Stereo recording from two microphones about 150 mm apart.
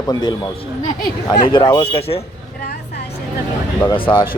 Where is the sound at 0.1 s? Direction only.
25° left (ahead or behind).